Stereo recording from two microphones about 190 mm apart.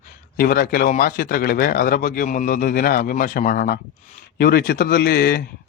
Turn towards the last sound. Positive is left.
turn(degrees=55)  # may be behind; listen again after turning